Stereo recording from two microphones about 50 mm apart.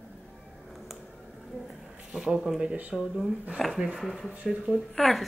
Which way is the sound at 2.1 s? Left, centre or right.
Centre.